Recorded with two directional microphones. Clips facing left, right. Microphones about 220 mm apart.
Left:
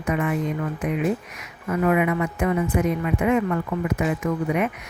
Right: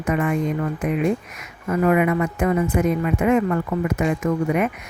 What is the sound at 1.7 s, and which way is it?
Speech, 45° right (ahead or behind).